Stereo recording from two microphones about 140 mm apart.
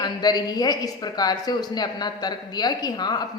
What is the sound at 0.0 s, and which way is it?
A woman's voice, 30° left (ahead or behind).